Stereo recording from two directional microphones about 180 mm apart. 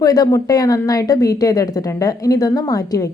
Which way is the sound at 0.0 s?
20° left (ahead or behind).